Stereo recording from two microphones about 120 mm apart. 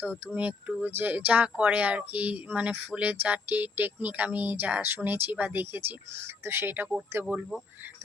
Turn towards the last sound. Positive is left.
turn(degrees=-15)  # may be behind; listen again after turning